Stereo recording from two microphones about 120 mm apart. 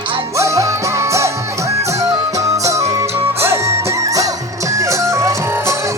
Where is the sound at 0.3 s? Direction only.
25° right (ahead or behind).